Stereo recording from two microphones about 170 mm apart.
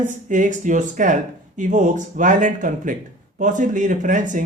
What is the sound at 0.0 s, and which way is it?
Speech, 50° right (ahead or behind).